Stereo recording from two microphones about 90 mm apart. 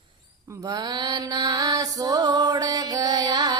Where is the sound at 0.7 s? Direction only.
50° right (ahead or behind).